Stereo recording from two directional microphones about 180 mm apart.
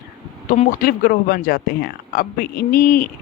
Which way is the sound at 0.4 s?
45° left (ahead or behind).